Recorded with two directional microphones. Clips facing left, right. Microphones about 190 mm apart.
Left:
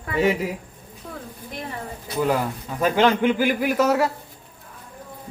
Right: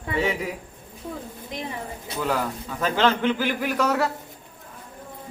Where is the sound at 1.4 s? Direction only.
15° right (ahead or behind).